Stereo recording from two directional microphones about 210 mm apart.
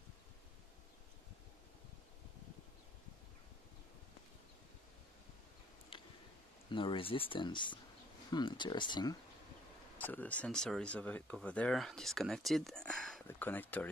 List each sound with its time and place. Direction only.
6.7 s speech: 25° left (ahead or behind)
9.9 s speech: 10° left (ahead or behind)